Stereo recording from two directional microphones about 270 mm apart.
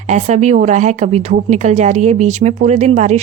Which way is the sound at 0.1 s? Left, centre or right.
Right.